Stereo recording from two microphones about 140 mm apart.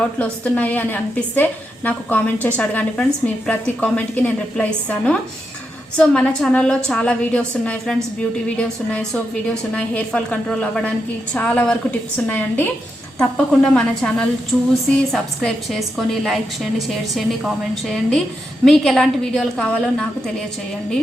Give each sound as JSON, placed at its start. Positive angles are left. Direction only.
{"t": 0.0, "sound": "a woman's voice", "side_deg": 10}
{"t": 13.1, "sound": "a woman's voice", "side_deg": 5}